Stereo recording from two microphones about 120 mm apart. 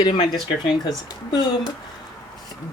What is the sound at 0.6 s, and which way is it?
Speech, 35° left (ahead or behind).